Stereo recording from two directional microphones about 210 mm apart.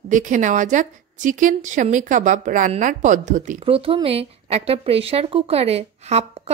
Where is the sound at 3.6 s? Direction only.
25° right (ahead or behind).